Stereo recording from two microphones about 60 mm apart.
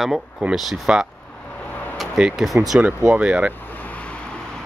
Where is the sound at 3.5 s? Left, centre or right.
Left; by 4.6 s centre.